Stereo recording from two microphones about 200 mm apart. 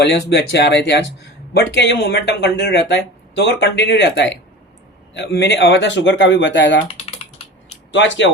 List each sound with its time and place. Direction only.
0.0 s speech: 60° left (ahead or behind)
6.8 s typing: 30° left (ahead or behind)
7.9 s speech: 65° left (ahead or behind)